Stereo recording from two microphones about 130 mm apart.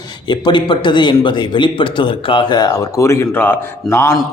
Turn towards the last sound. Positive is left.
turn(degrees=20)  # may be behind; listen again after turning